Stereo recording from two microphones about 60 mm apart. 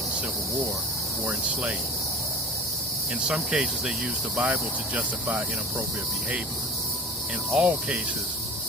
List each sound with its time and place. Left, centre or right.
1.3 s insect: right
3.2 s speech: centre
4.4 s speech: centre
7.5 s insect: right